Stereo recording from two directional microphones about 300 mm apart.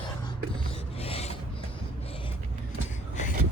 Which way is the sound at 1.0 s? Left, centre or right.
Centre.